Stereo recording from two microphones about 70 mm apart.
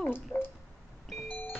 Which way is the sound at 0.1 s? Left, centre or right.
Left.